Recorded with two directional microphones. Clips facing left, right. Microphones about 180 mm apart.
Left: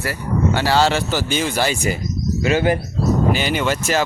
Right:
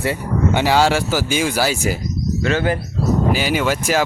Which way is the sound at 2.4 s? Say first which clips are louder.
Left 2 dB; 15° left (ahead or behind).